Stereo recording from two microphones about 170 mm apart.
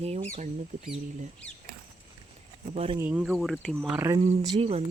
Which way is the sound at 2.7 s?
35° right (ahead or behind).